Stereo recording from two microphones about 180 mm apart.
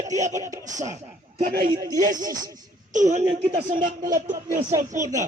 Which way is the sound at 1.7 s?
20° right (ahead or behind).